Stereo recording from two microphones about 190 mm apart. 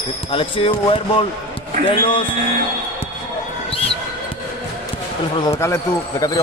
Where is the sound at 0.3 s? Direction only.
30° left (ahead or behind).